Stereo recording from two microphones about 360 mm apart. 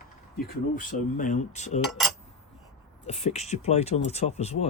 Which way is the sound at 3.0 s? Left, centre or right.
Centre.